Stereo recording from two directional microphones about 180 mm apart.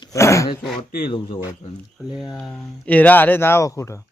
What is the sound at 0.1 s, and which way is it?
Speech, 15° left (ahead or behind).